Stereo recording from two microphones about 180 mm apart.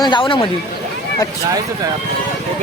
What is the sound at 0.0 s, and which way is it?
Speech, 25° left (ahead or behind).